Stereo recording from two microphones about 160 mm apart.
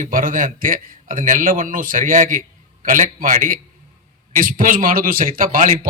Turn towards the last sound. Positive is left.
turn(degrees=-60)  # may be behind; listen again after turning